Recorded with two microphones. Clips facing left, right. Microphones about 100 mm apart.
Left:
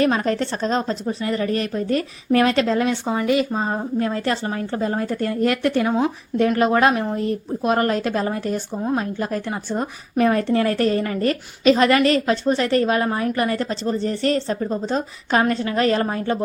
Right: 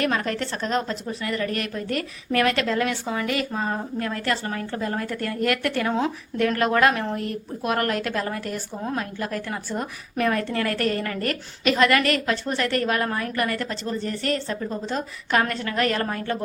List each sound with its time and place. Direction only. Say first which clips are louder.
0.0 s speech: left 5 dB; 25° left (ahead or behind)